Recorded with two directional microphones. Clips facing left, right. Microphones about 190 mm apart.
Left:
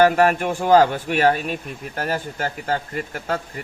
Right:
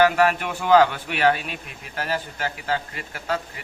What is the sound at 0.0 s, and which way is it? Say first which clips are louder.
A man's voice: left 3 dB; 45° left (ahead or behind).